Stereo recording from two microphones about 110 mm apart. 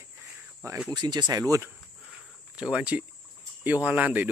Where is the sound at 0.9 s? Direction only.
40° right (ahead or behind).